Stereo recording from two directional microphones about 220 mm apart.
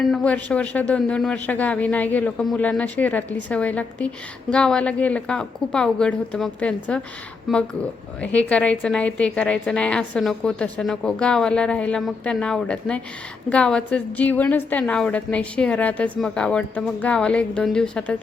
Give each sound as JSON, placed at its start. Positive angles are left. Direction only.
{"t": 0.0, "sound": "a woman's voice", "side_deg": 5}